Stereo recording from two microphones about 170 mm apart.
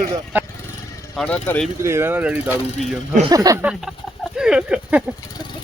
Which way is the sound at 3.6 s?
5° right (ahead or behind).